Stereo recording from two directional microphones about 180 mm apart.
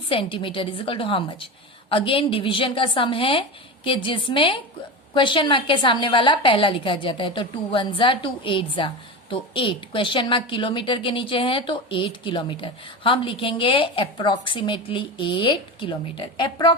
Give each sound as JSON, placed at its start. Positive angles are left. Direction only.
{"t": 0.1, "sound": "a woman's voice", "side_deg": 30}